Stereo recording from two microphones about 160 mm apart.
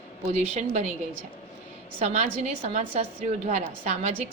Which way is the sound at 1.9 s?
45° right (ahead or behind).